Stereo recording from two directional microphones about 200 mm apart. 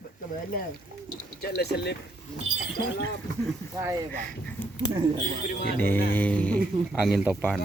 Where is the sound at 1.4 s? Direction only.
55° left (ahead or behind).